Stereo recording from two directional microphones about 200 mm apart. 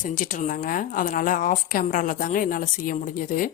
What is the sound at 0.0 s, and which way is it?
Speech, 40° left (ahead or behind).